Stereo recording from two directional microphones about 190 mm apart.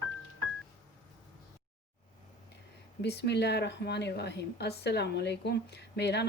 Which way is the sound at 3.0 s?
60° left (ahead or behind).